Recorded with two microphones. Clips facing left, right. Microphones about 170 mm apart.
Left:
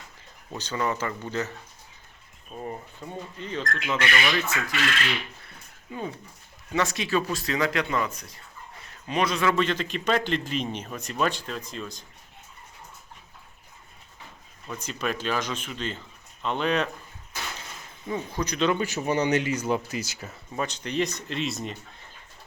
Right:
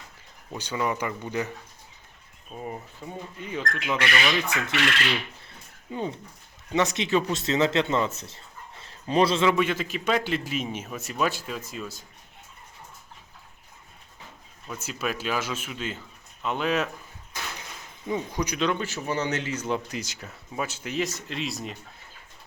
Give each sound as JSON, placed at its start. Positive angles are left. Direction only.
{"t": 0.5, "sound": "speech", "side_deg": -10}
{"t": 2.6, "sound": "speech", "side_deg": -5}
{"t": 5.9, "sound": "speech", "side_deg": -25}
{"t": 9.5, "sound": "speech", "side_deg": -10}
{"t": 14.7, "sound": "speech", "side_deg": -5}
{"t": 18.1, "sound": "speech", "side_deg": -15}
{"t": 18.6, "sound": "speech", "side_deg": 5}
{"t": 18.9, "sound": "speech", "side_deg": 20}
{"t": 20.5, "sound": "speech", "side_deg": -5}